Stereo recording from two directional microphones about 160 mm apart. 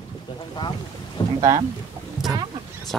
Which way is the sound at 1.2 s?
25° left (ahead or behind).